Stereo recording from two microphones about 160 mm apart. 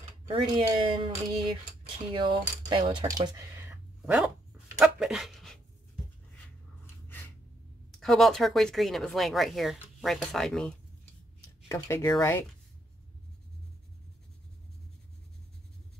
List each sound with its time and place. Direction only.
0.3 s speech: 30° right (ahead or behind)
2.1 s coin: 30° right (ahead or behind)
2.9 s speech: 25° right (ahead or behind); by 4.3 s 10° right (ahead or behind)
4.7 s dog: 5° right (ahead or behind)
7.9 s speech: centre (ahead or behind)
11.7 s speech: 20° left (ahead or behind)